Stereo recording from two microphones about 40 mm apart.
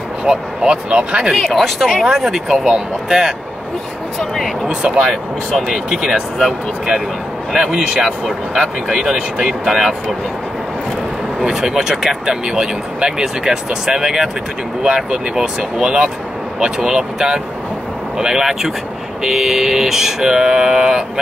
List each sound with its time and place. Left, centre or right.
0.2 s speech: right
1.4 s speech: centre
2.1 s speech: centre
4.6 s speech: right
5.7 s speech: centre
7.5 s speech: centre
9.7 s speech: centre
11.4 s speech: centre